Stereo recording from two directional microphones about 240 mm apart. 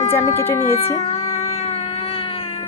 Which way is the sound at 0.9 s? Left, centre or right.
Left.